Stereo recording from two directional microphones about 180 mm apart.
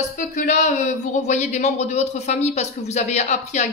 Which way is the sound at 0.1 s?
45° left (ahead or behind).